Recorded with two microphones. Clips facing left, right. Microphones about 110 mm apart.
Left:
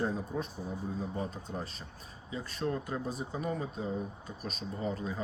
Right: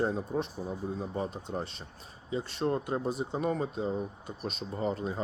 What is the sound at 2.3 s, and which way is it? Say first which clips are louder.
Speech: right 4 dB; 25° right (ahead or behind).